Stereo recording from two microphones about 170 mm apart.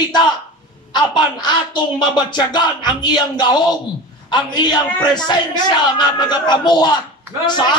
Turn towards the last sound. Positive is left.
turn(degrees=25)  # may be behind; listen again after turning